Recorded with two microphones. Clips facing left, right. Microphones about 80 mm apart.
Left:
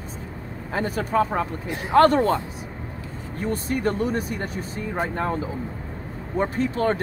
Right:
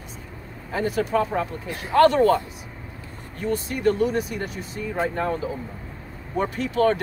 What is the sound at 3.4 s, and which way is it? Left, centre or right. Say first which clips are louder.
Speech: left 1 dB; left.